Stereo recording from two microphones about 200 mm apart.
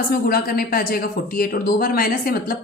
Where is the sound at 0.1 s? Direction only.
50° left (ahead or behind).